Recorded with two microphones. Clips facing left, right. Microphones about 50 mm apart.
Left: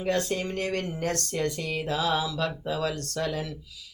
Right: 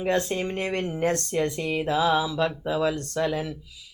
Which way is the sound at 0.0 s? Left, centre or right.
Right.